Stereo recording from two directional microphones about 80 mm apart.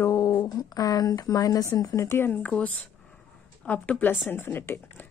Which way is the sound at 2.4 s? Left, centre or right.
Centre.